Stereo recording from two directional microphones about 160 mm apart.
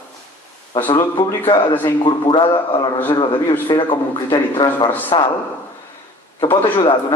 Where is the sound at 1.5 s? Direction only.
30° left (ahead or behind).